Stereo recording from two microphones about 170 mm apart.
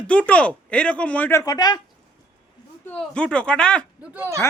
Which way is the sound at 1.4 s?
20° left (ahead or behind).